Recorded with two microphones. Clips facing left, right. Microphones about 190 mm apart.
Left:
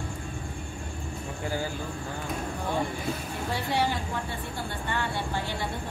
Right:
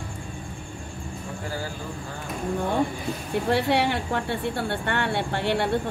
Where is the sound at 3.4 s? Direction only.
70° right (ahead or behind).